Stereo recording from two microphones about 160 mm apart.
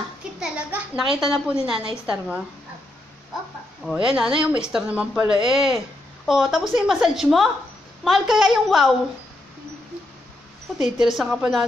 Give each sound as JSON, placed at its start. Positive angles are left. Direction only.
{"t": 0.4, "sound": "a child's voice", "side_deg": -10}
{"t": 3.8, "sound": "a woman's voice", "side_deg": -5}
{"t": 10.8, "sound": "a woman's voice", "side_deg": 0}